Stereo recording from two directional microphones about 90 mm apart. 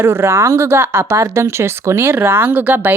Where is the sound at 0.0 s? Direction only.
30° right (ahead or behind).